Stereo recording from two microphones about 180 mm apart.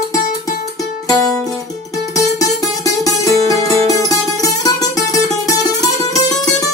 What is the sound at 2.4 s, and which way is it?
Music, 20° left (ahead or behind).